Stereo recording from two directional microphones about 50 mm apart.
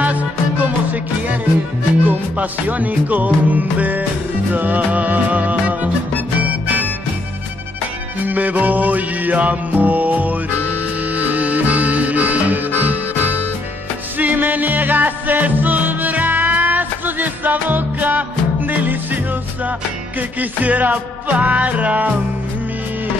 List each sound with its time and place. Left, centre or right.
0.0 s music: right
8.3 s music: right
20.2 s music: right